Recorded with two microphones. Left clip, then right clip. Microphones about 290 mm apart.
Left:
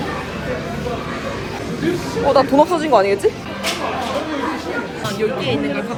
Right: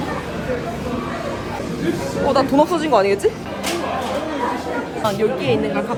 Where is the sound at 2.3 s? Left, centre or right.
Centre.